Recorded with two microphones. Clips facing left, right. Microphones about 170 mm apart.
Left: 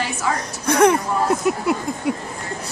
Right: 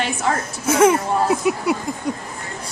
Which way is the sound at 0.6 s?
5° right (ahead or behind).